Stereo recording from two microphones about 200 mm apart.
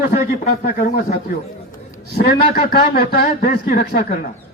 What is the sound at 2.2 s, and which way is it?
A man's voice, 50° left (ahead or behind).